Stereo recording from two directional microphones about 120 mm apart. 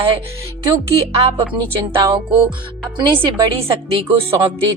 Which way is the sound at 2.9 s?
40° right (ahead or behind).